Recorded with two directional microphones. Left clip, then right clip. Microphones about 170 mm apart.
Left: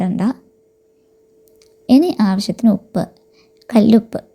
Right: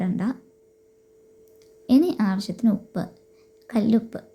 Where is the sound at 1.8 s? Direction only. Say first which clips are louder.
Left 7 dB; 40° left (ahead or behind).